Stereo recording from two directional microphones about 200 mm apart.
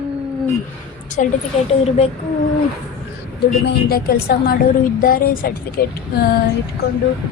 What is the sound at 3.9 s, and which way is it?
A woman's voice, 50° left (ahead or behind).